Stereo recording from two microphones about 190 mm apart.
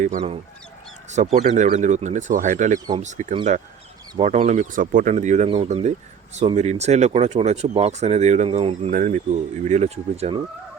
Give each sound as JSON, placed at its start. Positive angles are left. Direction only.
{"t": 0.0, "sound": "speech", "side_deg": -35}